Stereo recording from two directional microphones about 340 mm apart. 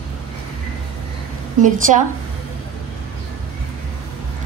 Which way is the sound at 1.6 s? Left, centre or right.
Right.